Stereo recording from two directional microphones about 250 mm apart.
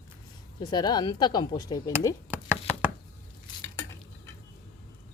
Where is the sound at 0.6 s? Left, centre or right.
Centre.